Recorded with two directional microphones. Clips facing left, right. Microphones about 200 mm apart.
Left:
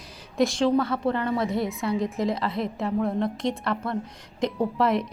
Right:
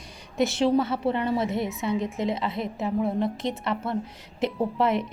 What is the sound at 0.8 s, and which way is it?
Speech, 25° right (ahead or behind).